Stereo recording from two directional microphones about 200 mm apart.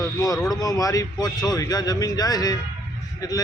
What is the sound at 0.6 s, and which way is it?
A man's voice, 20° left (ahead or behind).